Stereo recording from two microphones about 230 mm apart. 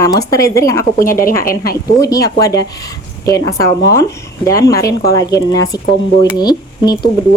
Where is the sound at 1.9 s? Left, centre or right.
Centre.